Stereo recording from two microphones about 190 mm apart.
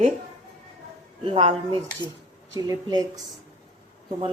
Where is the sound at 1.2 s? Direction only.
30° right (ahead or behind).